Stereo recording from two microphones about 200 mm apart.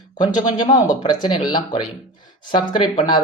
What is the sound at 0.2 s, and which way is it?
Speech, 20° left (ahead or behind).